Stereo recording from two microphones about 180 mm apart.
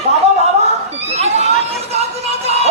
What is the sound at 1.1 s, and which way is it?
Chatter, 35° right (ahead or behind).